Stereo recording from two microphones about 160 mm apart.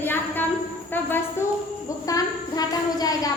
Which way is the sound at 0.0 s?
15° left (ahead or behind).